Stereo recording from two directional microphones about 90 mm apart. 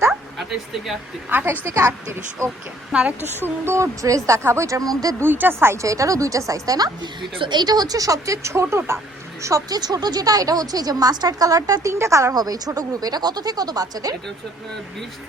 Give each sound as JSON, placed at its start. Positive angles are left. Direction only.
{"t": 0.1, "sound": "a sound", "side_deg": 0}
{"t": 1.3, "sound": "a woman's voice", "side_deg": -20}
{"t": 3.7, "sound": "speech", "side_deg": -35}
{"t": 5.2, "sound": "speech", "side_deg": -25}
{"t": 12.3, "sound": "speech", "side_deg": -45}